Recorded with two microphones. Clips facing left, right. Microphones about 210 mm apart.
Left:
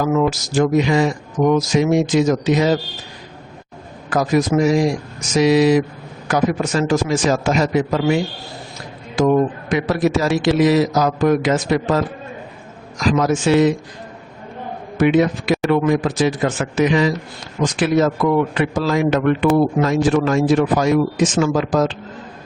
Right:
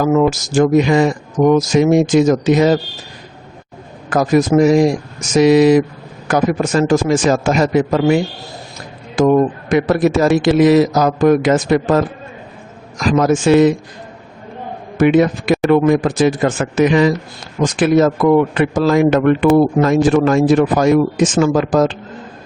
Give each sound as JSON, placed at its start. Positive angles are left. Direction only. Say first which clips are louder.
{"t": 0.0, "sound": "speech", "louder": "right 4 dB", "side_deg": -50}
{"t": 4.1, "sound": "speech", "louder": "right 4 dB", "side_deg": -50}
{"t": 14.9, "sound": "speech", "louder": "right 3 dB", "side_deg": -50}